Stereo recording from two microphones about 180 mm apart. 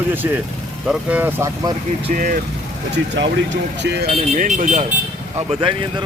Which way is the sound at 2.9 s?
85° right.